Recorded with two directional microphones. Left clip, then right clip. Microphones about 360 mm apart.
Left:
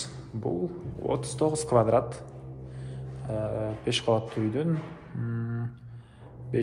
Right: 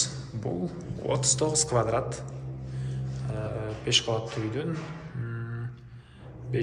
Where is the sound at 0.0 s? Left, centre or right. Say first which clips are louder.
Right 2 dB; centre.